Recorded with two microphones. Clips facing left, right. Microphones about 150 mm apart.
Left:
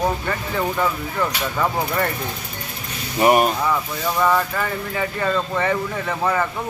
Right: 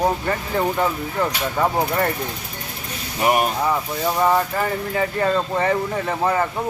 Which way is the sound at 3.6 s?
25° right (ahead or behind).